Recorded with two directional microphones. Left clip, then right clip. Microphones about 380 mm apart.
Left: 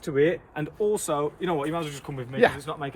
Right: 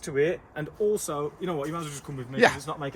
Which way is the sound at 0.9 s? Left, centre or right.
Centre.